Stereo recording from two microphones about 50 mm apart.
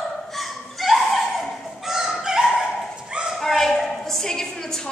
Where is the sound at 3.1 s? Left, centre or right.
Centre.